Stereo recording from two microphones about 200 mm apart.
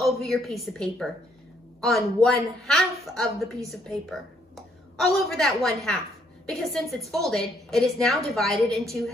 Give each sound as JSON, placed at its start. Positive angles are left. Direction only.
{"t": 0.0, "sound": "a woman's voice", "side_deg": 0}